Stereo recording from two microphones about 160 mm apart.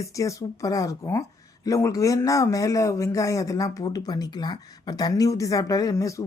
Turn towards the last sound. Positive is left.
turn(degrees=20)  # may be behind; listen again after turning